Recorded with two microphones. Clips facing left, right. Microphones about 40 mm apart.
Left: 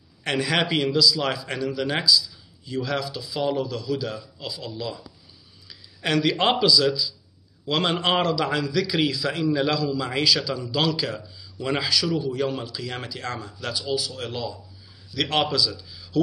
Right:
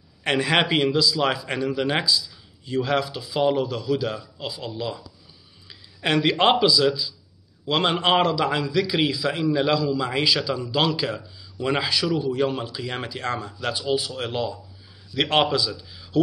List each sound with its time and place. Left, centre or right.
0.2 s speech: right
2.1 s speech: right; by 5.0 s centre
5.7 s a sound: right
6.6 s a man's voice: centre